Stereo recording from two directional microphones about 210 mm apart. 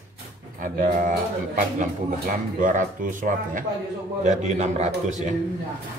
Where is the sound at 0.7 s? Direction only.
35° right (ahead or behind).